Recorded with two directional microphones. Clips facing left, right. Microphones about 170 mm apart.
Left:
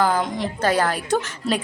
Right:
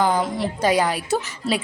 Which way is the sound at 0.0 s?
Centre (ahead or behind).